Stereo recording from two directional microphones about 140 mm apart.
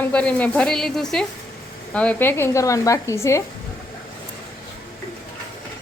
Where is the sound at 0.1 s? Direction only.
10° left (ahead or behind).